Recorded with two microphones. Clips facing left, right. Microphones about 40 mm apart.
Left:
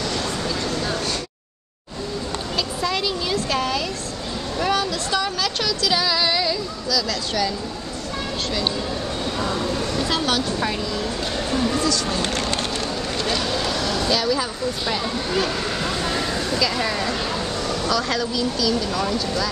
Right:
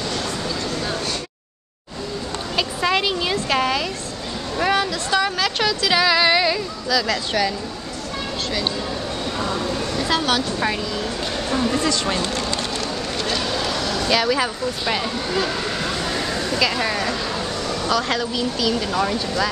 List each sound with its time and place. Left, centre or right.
2.5 s a sound: right
4.6 s speech: centre
9.4 s vehicle: centre
11.8 s speech: right
12.2 s speech: left
13.2 s a sound: centre
14.0 s speech: right
15.3 s vehicle: centre
16.7 s speech: centre
17.1 s a sound: centre
17.8 s speech: centre